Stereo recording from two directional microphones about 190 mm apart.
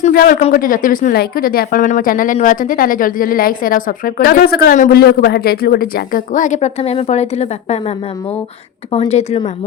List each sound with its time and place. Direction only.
0.0 s a woman's voice: 45° left (ahead or behind)